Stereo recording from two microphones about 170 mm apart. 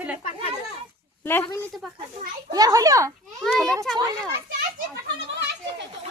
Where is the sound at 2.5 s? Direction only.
20° right (ahead or behind).